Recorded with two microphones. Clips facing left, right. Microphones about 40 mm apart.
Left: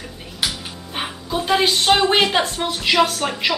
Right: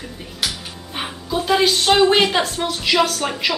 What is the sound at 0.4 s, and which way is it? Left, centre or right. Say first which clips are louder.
Speech: left 1 dB; centre.